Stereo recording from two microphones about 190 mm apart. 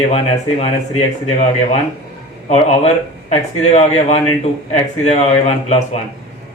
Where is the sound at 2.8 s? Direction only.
35° left (ahead or behind).